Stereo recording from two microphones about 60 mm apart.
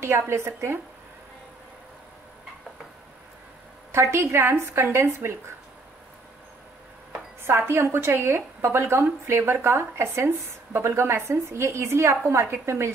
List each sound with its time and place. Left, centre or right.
0.0 s speech: right
3.9 s speech: right
7.4 s speech: right